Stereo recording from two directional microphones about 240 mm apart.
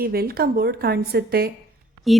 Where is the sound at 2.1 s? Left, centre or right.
Centre.